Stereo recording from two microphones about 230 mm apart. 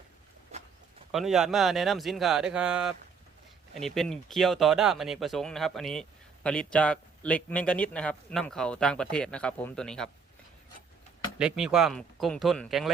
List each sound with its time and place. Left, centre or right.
1.1 s speech: centre
11.3 s speech: centre